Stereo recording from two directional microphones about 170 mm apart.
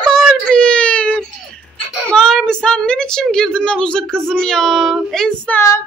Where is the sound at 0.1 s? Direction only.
5° left (ahead or behind).